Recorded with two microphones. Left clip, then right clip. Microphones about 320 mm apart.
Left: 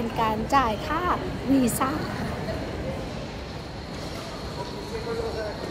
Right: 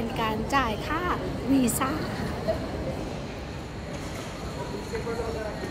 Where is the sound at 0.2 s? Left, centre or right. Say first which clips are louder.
Left 4 dB; centre.